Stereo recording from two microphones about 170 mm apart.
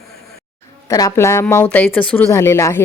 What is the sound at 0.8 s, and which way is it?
A woman's voice, 20° left (ahead or behind).